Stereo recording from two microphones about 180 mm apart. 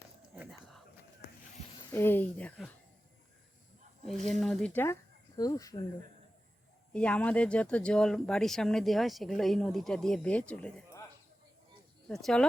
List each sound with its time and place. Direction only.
0.3 s a sound: centre (ahead or behind)
1.9 s speech: 10° left (ahead or behind)
4.0 s speech: centre (ahead or behind); by 5.8 s 20° left (ahead or behind)
6.9 s speech: 5° left (ahead or behind)
12.0 s speech: 5° left (ahead or behind)